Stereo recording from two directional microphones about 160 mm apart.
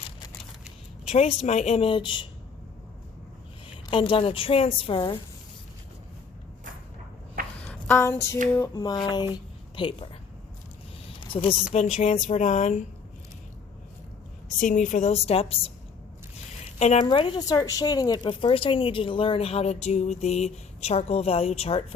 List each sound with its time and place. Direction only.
1.1 s speech: 45° left (ahead or behind)
3.8 s speech: 30° left (ahead or behind)
7.4 s a sound: 60° right (ahead or behind)
7.7 s a woman's voice: 10° left (ahead or behind)
8.5 s a sound: 15° left (ahead or behind)
9.3 s a sound: 30° left (ahead or behind)
11.3 s speech: 35° left (ahead or behind)
11.9 s speech: 50° left (ahead or behind)
14.6 s speech: 50° left (ahead or behind); by 15.7 s 35° left (ahead or behind)
16.7 s speech: 45° left (ahead or behind)
17.1 s speech: 30° left (ahead or behind)